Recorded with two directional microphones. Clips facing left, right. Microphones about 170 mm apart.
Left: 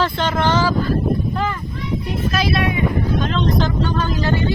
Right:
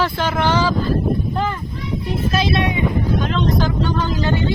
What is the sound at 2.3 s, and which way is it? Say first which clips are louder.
Speech: even; 25° right (ahead or behind).